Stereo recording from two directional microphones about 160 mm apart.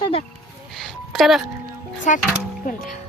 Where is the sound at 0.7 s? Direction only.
Centre (ahead or behind).